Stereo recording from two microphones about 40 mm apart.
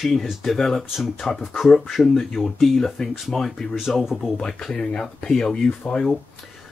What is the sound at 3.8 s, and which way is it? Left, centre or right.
Speech, centre.